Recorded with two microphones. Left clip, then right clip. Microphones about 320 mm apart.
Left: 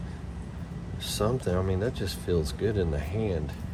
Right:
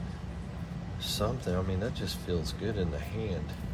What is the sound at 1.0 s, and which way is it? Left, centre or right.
Speech, left.